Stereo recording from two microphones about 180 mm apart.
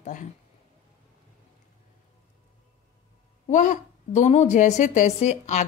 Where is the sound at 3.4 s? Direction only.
45° left (ahead or behind).